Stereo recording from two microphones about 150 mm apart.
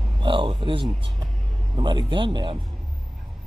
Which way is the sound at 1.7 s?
30° right (ahead or behind).